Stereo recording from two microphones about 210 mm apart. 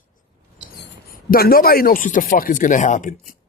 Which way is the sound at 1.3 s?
45° left (ahead or behind).